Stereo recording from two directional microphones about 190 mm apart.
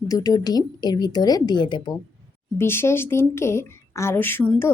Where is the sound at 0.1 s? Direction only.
20° left (ahead or behind).